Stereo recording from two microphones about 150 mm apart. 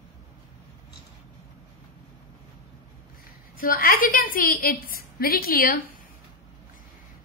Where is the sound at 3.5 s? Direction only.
70° left (ahead or behind).